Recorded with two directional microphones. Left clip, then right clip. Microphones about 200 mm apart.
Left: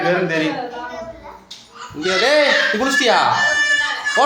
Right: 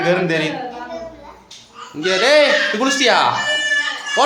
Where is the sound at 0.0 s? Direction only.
20° right (ahead or behind).